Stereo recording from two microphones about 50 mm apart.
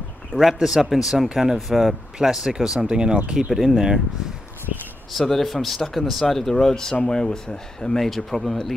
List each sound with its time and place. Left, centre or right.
0.4 s speech: centre
2.9 s speech: centre
3.3 s speech: centre
5.1 s speech: centre